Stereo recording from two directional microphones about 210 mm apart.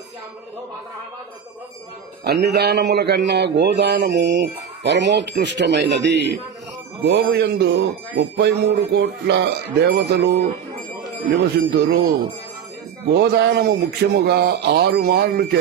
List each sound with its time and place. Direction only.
2.2 s a man's voice: 50° right (ahead or behind)
11.7 s speech: 50° right (ahead or behind)
13.1 s speech: 50° right (ahead or behind)